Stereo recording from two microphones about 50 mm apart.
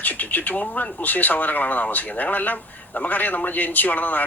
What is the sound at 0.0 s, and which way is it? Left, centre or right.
Speech, left.